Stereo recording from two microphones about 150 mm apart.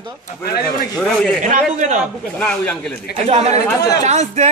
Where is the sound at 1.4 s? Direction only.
55° right (ahead or behind).